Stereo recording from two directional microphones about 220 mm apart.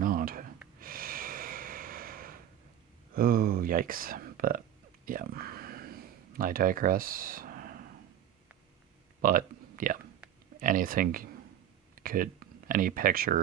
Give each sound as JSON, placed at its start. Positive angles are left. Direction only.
{"t": 0.0, "sound": "gasp", "side_deg": -40}
{"t": 0.8, "sound": "snort", "side_deg": -40}
{"t": 3.2, "sound": "speech", "side_deg": -40}
{"t": 5.0, "sound": "a sound", "side_deg": -40}
{"t": 9.2, "sound": "speech", "side_deg": -40}